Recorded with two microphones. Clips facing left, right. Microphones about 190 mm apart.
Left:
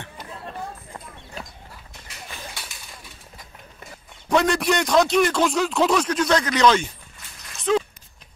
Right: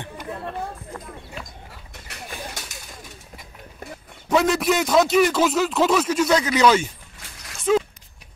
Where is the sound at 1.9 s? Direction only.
65° right (ahead or behind).